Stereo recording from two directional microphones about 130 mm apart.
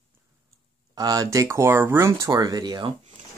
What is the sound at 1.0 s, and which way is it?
Speech, 30° right (ahead or behind).